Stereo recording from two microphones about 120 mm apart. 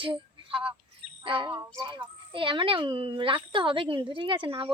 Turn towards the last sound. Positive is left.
turn(degrees=-45)  # may be behind; listen again after turning